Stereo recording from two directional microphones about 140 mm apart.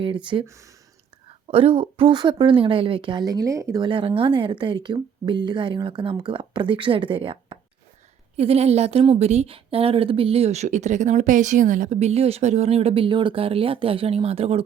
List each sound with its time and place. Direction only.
0.0 s speech: 35° right (ahead or behind)
0.4 s speech: 20° right (ahead or behind)
1.5 s a woman's voice: 45° right (ahead or behind)